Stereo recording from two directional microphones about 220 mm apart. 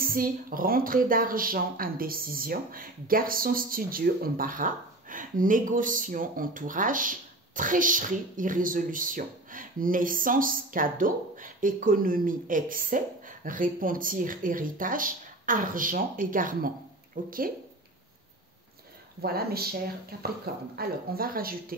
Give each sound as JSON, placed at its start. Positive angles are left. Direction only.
{"t": 0.0, "sound": "a woman's voice", "side_deg": -40}
{"t": 19.2, "sound": "a woman's voice", "side_deg": -45}